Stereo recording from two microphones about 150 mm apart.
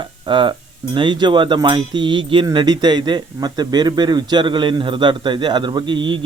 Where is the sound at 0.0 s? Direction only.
35° right (ahead or behind).